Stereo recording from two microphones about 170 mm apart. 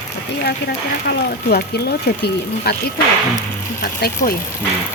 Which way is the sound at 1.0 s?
70° left (ahead or behind).